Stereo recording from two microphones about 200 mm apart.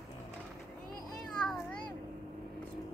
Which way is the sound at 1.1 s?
5° left (ahead or behind).